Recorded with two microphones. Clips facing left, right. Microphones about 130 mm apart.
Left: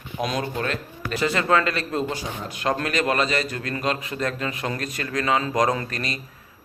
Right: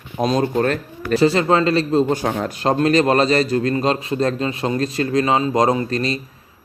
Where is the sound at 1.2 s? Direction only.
30° right (ahead or behind).